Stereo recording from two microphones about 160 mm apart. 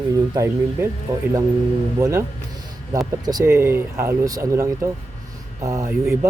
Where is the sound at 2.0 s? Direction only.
20° right (ahead or behind).